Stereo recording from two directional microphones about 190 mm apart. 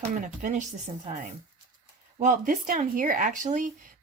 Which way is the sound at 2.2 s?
45° right (ahead or behind).